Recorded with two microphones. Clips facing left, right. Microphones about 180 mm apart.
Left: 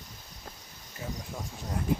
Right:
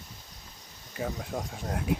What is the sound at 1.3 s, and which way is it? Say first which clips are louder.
Speech: right 6 dB; 60° right (ahead or behind).